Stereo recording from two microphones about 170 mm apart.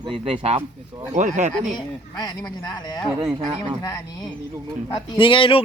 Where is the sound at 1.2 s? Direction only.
45° right (ahead or behind).